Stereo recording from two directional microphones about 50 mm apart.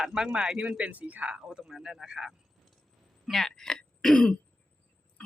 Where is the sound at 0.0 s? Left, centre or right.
Centre.